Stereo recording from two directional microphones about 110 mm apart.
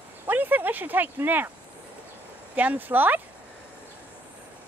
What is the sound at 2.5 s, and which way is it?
Speech, 15° right (ahead or behind).